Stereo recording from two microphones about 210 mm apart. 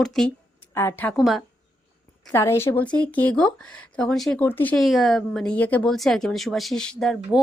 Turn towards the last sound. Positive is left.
turn(degrees=0)  # may be behind; listen again after turning